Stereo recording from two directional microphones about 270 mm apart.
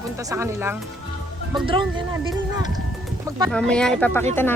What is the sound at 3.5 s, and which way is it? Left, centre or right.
Speech, centre.